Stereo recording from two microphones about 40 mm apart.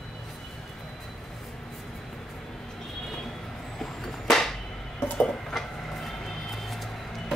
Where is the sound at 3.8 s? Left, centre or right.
Centre.